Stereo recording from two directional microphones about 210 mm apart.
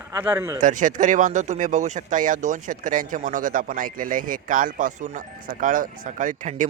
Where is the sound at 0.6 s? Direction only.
40° right (ahead or behind).